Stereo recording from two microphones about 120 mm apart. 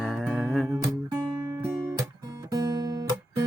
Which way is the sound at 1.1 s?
30° right (ahead or behind).